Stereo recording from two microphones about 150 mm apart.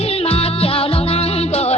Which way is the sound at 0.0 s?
40° left (ahead or behind).